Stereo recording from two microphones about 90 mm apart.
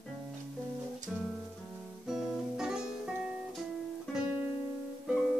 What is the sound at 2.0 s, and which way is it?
Guitar, 5° right (ahead or behind).